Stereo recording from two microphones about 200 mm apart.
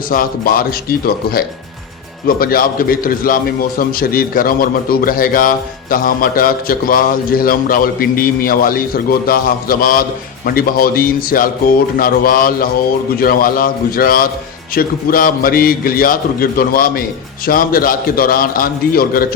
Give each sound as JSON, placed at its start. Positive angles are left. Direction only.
{"t": 0.1, "sound": "a man's voice", "side_deg": 45}